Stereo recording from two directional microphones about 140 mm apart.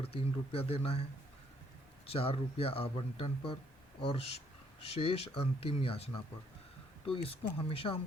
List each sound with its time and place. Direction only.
0.0 s speech: 45° left (ahead or behind)
2.0 s speech: 45° left (ahead or behind)
7.1 s speech: 45° left (ahead or behind)